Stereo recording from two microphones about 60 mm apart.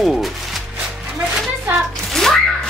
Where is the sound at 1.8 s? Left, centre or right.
Centre.